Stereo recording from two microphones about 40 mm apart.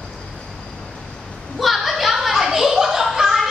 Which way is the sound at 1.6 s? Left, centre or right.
Centre.